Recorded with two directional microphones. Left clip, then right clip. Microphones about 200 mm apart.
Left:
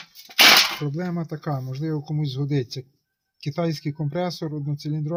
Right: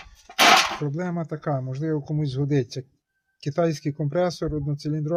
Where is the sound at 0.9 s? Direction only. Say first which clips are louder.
Right 1 dB; 30° right (ahead or behind).